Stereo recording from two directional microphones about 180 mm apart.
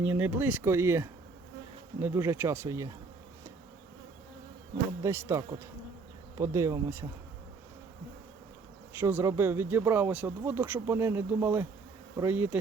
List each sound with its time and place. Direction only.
0.0 s speech: 10° right (ahead or behind)
5.0 s speech: 15° right (ahead or behind)
9.0 s speech: 10° right (ahead or behind)